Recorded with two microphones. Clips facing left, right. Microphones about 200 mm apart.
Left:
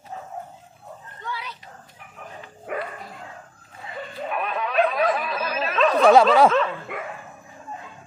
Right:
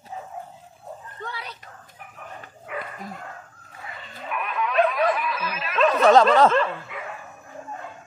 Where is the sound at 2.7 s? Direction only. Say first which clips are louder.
Left 4 dB; 45° left (ahead or behind).